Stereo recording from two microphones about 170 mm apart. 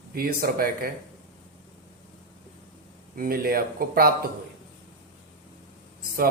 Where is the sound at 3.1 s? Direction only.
55° right (ahead or behind).